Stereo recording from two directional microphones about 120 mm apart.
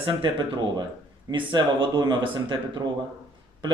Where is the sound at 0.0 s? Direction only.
45° right (ahead or behind).